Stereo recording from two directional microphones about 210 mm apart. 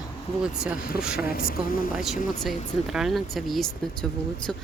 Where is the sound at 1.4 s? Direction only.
45° left (ahead or behind).